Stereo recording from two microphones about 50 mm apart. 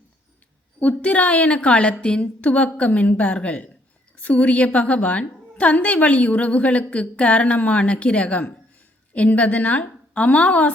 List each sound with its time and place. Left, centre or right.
0.8 s a woman's voice: left